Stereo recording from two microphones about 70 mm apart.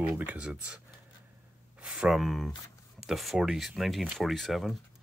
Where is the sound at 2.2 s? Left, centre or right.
Centre.